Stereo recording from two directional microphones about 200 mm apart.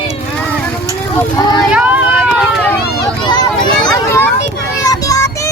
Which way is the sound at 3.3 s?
20° left (ahead or behind).